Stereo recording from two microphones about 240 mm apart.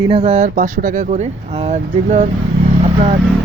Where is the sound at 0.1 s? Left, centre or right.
Right.